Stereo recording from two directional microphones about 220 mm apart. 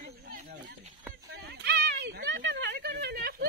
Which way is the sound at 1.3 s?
45° right (ahead or behind).